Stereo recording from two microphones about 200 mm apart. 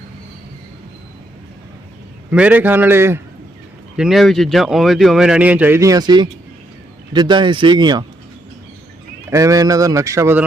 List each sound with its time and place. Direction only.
2.3 s speech: 5° right (ahead or behind)
9.3 s speech: 15° right (ahead or behind)